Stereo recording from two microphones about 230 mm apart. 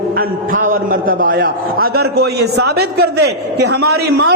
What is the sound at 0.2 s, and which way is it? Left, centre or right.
A man's voice, right.